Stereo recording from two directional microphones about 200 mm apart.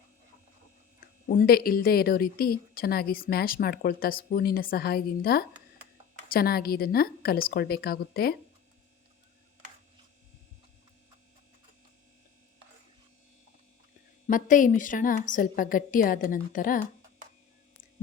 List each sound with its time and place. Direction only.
1.3 s a woman's voice: 45° left (ahead or behind)
14.3 s a woman's voice: 40° left (ahead or behind)